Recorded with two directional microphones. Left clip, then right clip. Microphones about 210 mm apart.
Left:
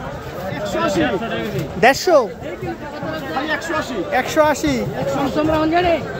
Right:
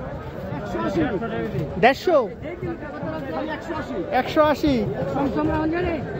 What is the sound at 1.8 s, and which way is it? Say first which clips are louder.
Speech: left 5 dB; 15° left (ahead or behind).